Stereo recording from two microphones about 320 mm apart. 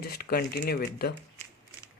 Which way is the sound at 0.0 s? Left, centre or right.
Left.